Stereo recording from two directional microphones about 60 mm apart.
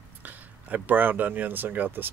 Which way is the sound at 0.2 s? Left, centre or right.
Right.